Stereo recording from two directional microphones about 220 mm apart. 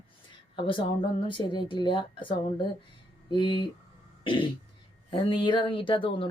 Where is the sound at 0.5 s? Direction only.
25° left (ahead or behind).